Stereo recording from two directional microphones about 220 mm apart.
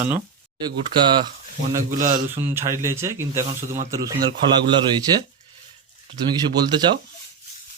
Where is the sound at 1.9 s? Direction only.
35° right (ahead or behind).